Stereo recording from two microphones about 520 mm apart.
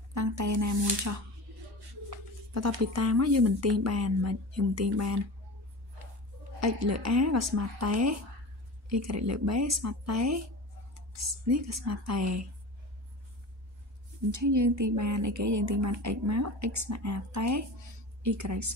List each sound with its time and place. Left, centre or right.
0.1 s speech: right
2.5 s speech: right
6.6 s a woman's voice: right
14.3 s a woman's voice: right